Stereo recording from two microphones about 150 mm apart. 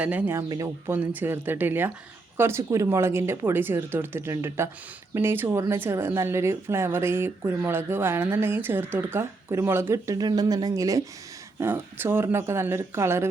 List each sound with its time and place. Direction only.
0.0 s speech: 10° right (ahead or behind)
0.4 s speech: 25° right (ahead or behind)